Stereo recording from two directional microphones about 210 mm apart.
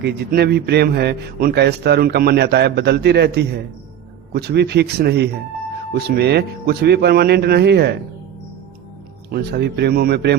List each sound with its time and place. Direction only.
0.0 s a man's voice: 50° right (ahead or behind)
9.3 s a man's voice: 50° right (ahead or behind)